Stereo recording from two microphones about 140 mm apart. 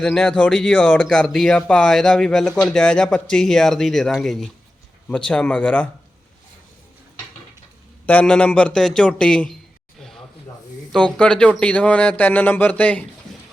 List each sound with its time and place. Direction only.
0.0 s speech: 5° left (ahead or behind)
8.0 s speech: 10° left (ahead or behind)
10.9 s speech: 10° left (ahead or behind)